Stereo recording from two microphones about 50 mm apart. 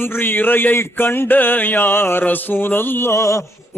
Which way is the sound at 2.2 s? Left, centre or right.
Left.